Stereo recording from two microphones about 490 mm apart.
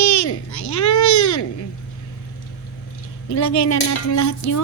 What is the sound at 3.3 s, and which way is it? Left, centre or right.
Speech, left.